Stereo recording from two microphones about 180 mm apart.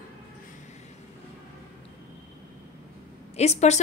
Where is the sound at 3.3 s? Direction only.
35° left (ahead or behind).